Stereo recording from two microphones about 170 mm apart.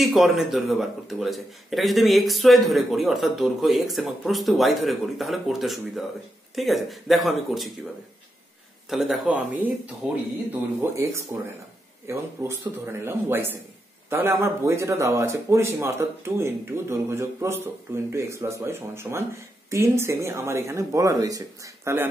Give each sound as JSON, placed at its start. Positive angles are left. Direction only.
{"t": 0.0, "sound": "speech", "side_deg": 0}
{"t": 8.9, "sound": "speech", "side_deg": 0}